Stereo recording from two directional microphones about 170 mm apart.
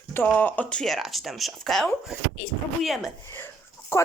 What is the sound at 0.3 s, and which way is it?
Speech, 10° left (ahead or behind).